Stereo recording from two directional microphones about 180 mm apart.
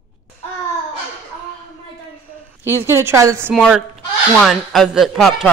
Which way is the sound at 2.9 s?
15° right (ahead or behind).